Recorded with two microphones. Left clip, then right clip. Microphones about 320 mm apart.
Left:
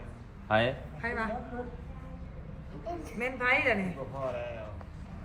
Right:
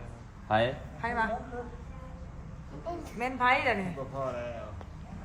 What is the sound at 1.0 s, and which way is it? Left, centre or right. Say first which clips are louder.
Speech: right 3 dB; right.